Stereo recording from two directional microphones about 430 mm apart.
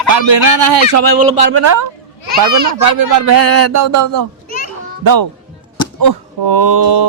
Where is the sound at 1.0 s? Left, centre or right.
Right.